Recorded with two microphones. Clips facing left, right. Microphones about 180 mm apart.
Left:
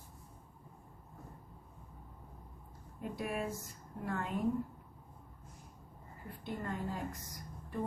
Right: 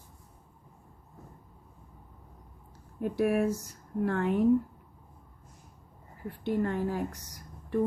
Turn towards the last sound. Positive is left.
turn(degrees=-80)